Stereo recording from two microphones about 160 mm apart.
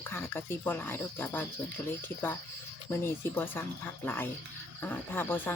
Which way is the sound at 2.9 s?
10° left (ahead or behind).